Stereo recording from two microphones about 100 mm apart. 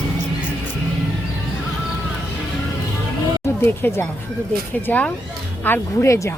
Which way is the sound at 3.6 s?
20° left (ahead or behind).